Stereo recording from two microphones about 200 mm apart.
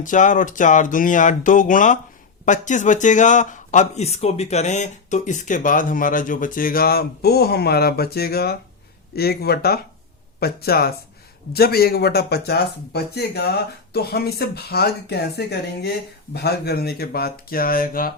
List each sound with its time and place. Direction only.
0.0 s speech: 40° left (ahead or behind)